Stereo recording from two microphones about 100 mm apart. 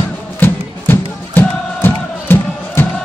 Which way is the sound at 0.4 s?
20° left (ahead or behind).